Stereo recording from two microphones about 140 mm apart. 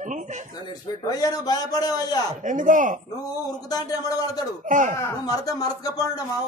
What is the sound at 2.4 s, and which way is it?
Speech, 65° right (ahead or behind).